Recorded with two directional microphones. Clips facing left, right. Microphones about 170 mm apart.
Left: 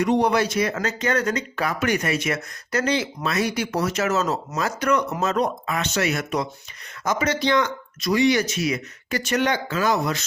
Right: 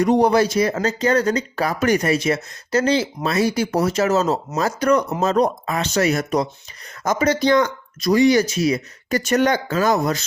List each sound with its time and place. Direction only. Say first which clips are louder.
0.0 s speech: right 4 dB; 35° right (ahead or behind)